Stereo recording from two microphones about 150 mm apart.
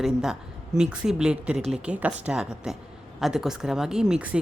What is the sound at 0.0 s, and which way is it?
Speech, 5° right (ahead or behind).